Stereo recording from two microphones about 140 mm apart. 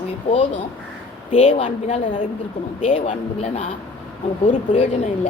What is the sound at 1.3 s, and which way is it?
Speech, 40° left (ahead or behind).